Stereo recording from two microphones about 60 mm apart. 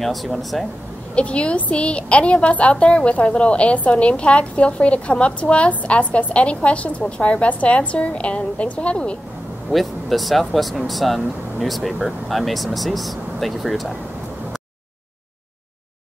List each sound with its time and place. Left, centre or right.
0.0 s speech: centre
1.1 s a woman's voice: centre
9.7 s speech: centre